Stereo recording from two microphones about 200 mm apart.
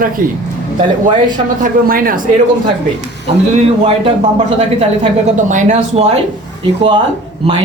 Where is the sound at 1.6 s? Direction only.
45° right (ahead or behind).